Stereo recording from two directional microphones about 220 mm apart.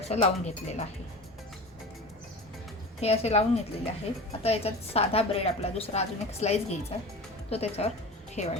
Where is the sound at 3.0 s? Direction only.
30° left (ahead or behind).